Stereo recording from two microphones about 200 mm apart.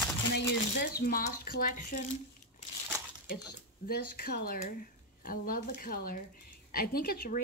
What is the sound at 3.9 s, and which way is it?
Speech, 45° left (ahead or behind).